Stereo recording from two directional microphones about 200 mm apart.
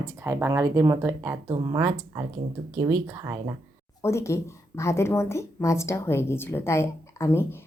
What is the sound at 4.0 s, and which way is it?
Speech, 15° left (ahead or behind).